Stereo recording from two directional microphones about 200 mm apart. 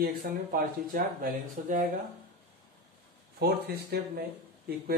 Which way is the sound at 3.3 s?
50° right (ahead or behind).